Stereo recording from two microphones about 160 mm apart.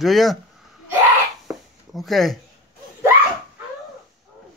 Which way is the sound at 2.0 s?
Centre (ahead or behind).